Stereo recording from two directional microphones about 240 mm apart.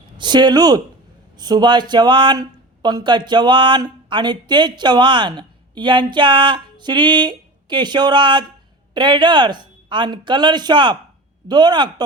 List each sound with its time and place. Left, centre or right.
0.2 s speech: centre